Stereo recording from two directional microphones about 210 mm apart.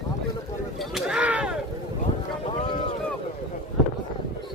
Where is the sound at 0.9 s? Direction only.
5° right (ahead or behind).